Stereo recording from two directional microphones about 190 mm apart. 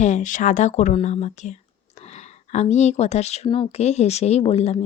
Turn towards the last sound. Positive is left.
turn(degrees=35)  # may be behind; listen again after turning